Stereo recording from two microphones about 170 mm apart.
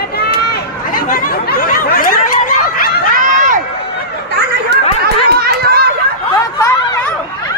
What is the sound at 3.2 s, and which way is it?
Run, 50° right (ahead or behind).